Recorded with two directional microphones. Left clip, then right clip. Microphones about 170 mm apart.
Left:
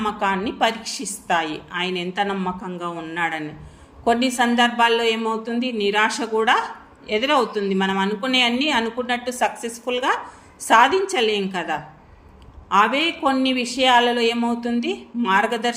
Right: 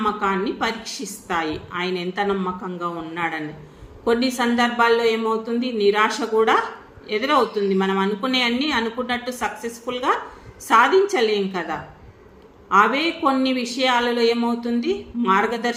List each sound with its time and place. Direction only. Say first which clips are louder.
0.0 s a woman's voice: right 1 dB; 40° left (ahead or behind)